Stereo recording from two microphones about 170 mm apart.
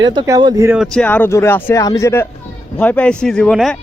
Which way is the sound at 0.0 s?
25° right (ahead or behind).